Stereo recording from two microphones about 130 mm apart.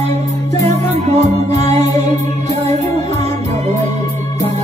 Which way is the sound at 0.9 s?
60° right (ahead or behind).